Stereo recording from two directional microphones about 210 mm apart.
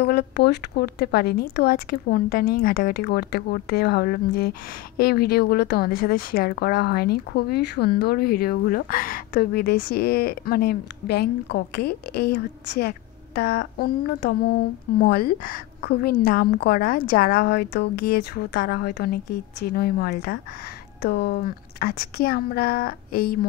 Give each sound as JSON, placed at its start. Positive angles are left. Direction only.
{"t": 0.0, "sound": "a woman's voice", "side_deg": 50}